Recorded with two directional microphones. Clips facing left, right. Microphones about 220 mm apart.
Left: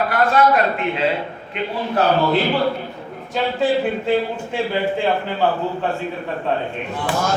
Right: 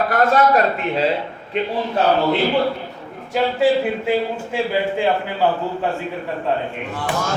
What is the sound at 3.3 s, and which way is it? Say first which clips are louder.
Speech: right 2 dB; 10° right (ahead or behind).